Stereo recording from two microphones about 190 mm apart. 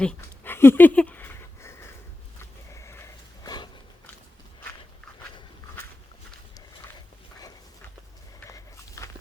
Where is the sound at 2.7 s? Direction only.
15° left (ahead or behind).